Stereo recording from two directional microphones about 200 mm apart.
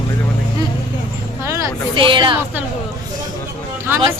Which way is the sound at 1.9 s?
25° right (ahead or behind).